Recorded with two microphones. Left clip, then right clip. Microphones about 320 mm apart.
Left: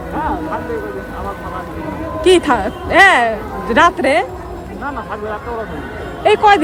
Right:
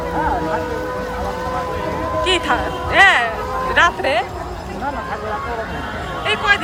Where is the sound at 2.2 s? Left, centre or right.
Centre.